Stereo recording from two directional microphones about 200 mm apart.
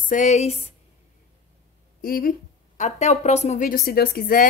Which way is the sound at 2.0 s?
45° left (ahead or behind).